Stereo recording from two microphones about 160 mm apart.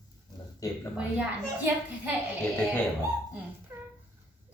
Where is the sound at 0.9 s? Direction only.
10° right (ahead or behind).